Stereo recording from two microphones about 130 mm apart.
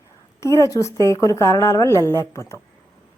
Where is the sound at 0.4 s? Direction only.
25° left (ahead or behind).